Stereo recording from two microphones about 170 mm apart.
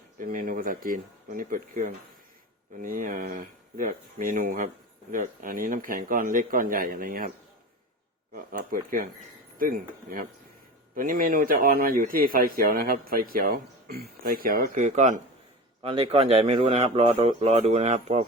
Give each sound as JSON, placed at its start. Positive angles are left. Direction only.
{"t": 0.2, "sound": "a man's voice", "side_deg": -55}
{"t": 15.8, "sound": "speech", "side_deg": -35}